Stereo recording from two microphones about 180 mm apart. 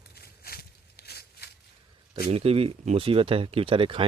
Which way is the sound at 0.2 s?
60° left (ahead or behind).